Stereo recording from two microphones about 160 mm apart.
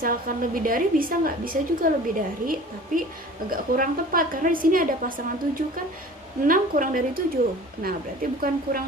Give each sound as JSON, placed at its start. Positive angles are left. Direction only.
{"t": 0.0, "sound": "a woman's voice", "side_deg": -60}